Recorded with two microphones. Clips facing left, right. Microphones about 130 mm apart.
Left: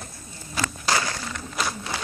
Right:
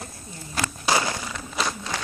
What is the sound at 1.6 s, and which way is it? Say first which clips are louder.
Crowd: right 1 dB; 10° left (ahead or behind).